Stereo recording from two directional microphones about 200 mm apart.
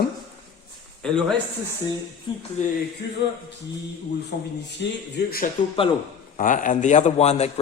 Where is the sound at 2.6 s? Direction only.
35° left (ahead or behind).